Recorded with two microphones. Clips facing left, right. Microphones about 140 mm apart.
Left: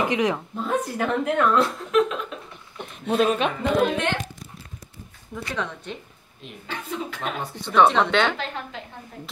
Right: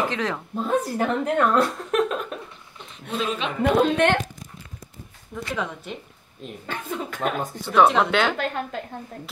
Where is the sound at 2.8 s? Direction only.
55° left (ahead or behind).